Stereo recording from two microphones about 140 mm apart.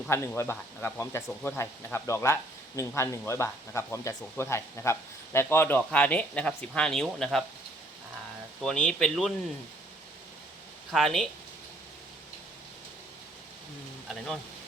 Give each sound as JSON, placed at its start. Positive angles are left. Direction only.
{"t": 0.1, "sound": "speech", "side_deg": 15}
{"t": 1.3, "sound": "speech", "side_deg": 5}
{"t": 1.5, "sound": "speech", "side_deg": 20}
{"t": 8.6, "sound": "speech", "side_deg": 5}
{"t": 10.9, "sound": "speech", "side_deg": 5}